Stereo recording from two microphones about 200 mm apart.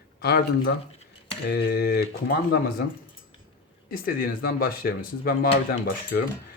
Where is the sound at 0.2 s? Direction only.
55° left (ahead or behind).